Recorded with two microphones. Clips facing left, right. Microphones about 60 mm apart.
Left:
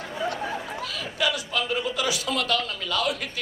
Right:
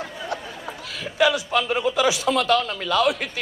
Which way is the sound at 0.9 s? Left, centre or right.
Right.